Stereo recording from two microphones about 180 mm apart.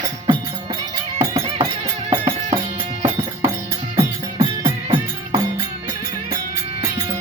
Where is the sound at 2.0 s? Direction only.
30° right (ahead or behind).